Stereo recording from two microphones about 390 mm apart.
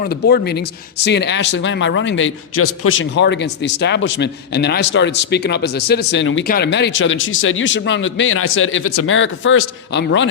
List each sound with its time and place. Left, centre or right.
0.0 s speech: left